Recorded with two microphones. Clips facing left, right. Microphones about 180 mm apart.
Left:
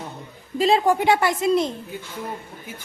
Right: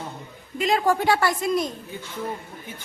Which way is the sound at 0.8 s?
20° left (ahead or behind).